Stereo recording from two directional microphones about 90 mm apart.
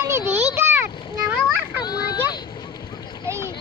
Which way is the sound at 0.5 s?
25° right (ahead or behind).